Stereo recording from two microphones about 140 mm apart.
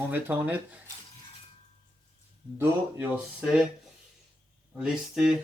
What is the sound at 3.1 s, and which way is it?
Speech, 10° right (ahead or behind).